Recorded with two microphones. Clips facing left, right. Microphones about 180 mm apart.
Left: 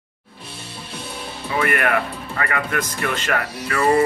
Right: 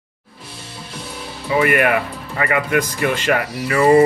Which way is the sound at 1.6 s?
15° right (ahead or behind).